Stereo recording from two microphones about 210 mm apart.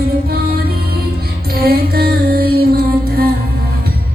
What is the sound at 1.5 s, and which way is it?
Music, 45° right (ahead or behind).